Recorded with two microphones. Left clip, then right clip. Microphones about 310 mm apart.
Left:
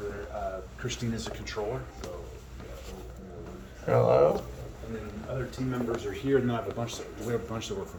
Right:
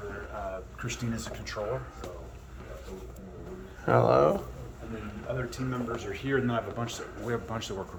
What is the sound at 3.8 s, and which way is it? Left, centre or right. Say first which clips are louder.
Speech: even; centre.